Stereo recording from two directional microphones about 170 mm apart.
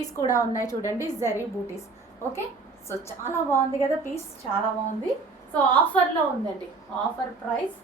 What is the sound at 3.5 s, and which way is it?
Speech, 15° left (ahead or behind).